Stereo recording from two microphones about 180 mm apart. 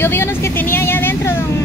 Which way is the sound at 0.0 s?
15° left (ahead or behind).